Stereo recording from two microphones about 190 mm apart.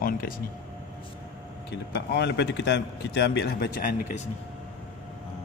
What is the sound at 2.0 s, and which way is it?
Speech, 65° left (ahead or behind).